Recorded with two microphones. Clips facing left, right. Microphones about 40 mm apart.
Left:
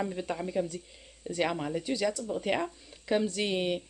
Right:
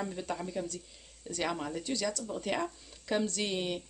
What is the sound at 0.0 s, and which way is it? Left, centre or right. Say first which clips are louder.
Speech: left 3 dB; centre.